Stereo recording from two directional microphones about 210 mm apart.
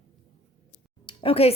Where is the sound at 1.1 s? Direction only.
25° left (ahead or behind).